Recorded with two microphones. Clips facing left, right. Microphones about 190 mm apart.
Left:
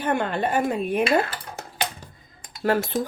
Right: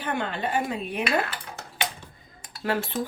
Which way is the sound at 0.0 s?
50° left (ahead or behind).